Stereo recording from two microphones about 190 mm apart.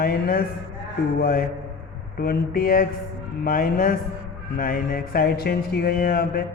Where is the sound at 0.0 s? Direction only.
50° left (ahead or behind).